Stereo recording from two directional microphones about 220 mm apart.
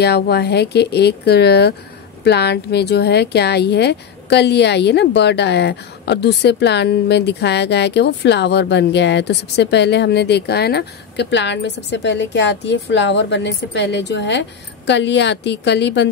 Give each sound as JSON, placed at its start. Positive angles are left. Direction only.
{"t": 0.0, "sound": "speech", "side_deg": 50}